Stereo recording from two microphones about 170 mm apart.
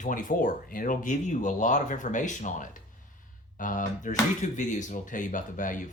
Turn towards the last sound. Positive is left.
turn(degrees=50)  # may be behind; listen again after turning